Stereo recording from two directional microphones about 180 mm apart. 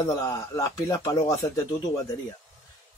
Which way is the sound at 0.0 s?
20° left (ahead or behind).